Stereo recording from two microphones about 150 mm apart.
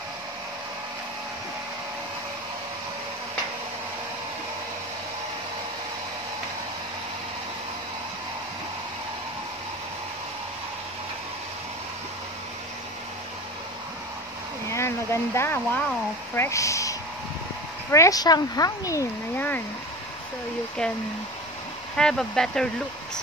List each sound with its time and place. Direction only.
14.7 s speech: 20° left (ahead or behind)
17.9 s speech: 20° left (ahead or behind)
19.3 s speech: 10° left (ahead or behind)
21.9 s speech: 5° left (ahead or behind)